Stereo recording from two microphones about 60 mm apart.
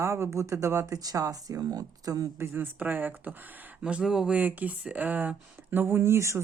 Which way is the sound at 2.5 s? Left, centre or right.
Right.